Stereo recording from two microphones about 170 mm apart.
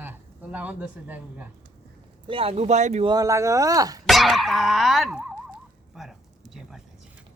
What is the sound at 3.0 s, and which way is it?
Speech, 25° right (ahead or behind).